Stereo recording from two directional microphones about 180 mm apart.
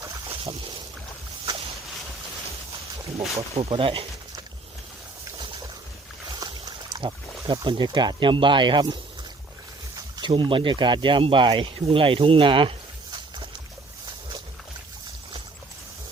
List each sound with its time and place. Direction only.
0.3 s boat: 30° right (ahead or behind)
3.2 s speech: 30° right (ahead or behind)
6.3 s a sound: 25° right (ahead or behind)
7.4 s speech: 25° right (ahead or behind)
10.2 s speech: 25° right (ahead or behind)